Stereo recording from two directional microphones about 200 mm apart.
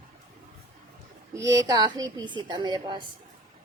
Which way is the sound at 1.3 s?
15° right (ahead or behind).